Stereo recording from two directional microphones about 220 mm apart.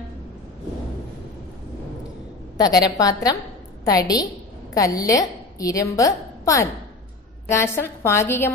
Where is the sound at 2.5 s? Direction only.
15° left (ahead or behind).